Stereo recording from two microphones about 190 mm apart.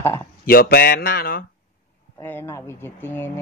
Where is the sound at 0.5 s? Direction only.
50° left (ahead or behind).